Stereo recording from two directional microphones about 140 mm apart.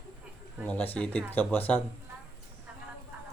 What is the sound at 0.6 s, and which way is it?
Speech, 15° left (ahead or behind).